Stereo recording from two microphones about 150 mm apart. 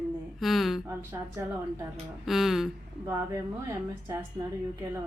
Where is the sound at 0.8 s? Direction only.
20° right (ahead or behind).